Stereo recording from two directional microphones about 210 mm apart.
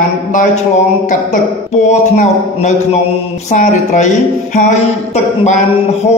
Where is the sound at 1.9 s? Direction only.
35° left (ahead or behind).